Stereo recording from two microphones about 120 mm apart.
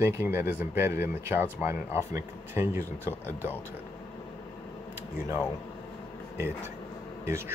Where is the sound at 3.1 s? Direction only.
15° left (ahead or behind).